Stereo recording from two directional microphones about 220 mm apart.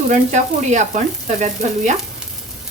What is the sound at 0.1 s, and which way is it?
Frying, 35° right (ahead or behind).